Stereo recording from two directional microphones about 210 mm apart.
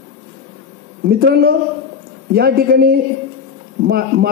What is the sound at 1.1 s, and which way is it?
A man's voice, 45° right (ahead or behind).